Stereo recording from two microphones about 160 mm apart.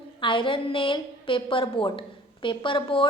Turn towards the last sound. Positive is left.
turn(degrees=30)  # may be behind; listen again after turning